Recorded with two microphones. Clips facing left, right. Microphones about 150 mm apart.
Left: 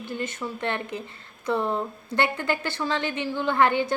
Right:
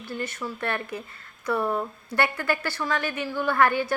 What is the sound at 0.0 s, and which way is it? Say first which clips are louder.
A woman's voice: left 1 dB; 20° left (ahead or behind).